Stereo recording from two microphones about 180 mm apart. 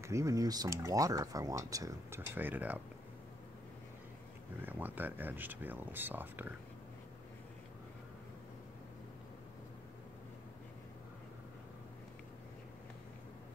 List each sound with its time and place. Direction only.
0.0 s speech: 15° right (ahead or behind)
4.6 s speech: 10° right (ahead or behind)